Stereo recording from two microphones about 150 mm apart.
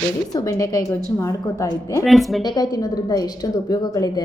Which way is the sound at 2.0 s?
Centre (ahead or behind).